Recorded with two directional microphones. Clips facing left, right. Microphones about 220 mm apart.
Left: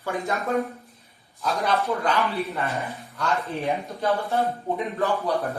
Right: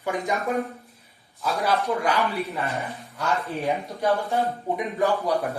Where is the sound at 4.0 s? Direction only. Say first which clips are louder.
Right 1 dB; 15° right (ahead or behind).